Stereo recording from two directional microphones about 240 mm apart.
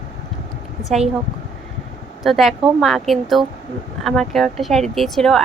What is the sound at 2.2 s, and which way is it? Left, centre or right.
Speech, centre.